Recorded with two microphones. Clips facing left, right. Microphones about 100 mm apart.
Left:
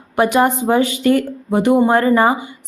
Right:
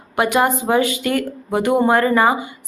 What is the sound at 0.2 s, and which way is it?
A woman's voice, 30° left (ahead or behind).